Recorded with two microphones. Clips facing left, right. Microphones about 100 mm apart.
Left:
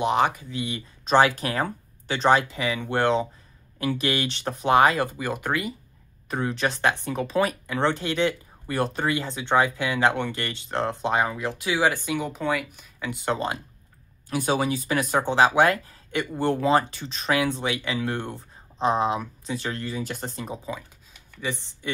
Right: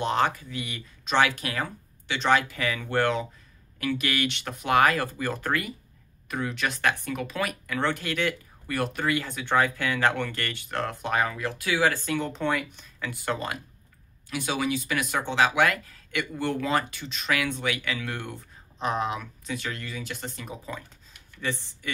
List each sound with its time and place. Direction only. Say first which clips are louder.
0.0 s speech: left 3 dB; 15° left (ahead or behind)
6.2 s speech: left 4 dB; 30° left (ahead or behind); by 12.8 s 5° left (ahead or behind)
13.0 s speech: left 4 dB; 20° left (ahead or behind)
14.3 s speech: left 4 dB; 40° left (ahead or behind)
21.4 s speech: left 1 dB; 15° left (ahead or behind)